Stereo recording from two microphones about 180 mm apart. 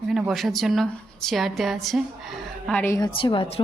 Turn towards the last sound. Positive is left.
turn(degrees=30)  # may be behind; listen again after turning